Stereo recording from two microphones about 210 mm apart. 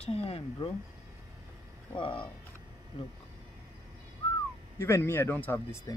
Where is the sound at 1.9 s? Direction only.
25° left (ahead or behind).